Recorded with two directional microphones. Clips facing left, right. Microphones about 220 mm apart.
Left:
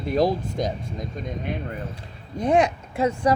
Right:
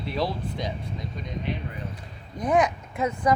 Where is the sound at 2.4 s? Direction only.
30° left (ahead or behind).